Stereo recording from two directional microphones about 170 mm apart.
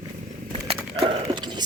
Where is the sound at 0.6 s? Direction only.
35° right (ahead or behind).